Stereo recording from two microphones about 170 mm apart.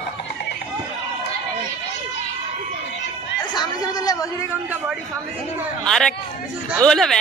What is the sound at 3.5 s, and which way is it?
Speech, 25° left (ahead or behind).